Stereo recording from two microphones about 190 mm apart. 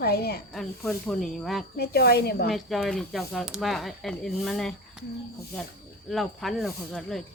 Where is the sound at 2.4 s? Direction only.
Centre (ahead or behind).